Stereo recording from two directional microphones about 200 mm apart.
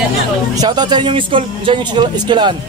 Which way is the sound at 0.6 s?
20° right (ahead or behind).